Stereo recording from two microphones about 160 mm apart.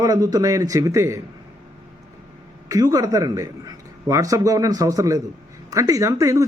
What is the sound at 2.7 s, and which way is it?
A man's voice, 20° right (ahead or behind).